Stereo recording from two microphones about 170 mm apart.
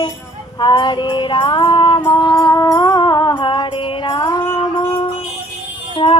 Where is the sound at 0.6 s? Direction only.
25° left (ahead or behind).